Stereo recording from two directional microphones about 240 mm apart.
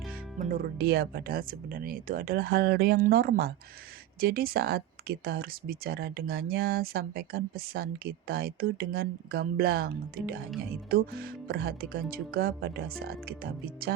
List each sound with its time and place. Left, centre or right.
0.3 s speech: right